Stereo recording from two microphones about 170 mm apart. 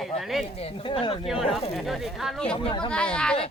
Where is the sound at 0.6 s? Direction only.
35° left (ahead or behind).